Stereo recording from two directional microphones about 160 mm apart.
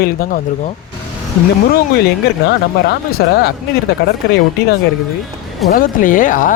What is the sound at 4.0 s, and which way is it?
Speech, 90° left.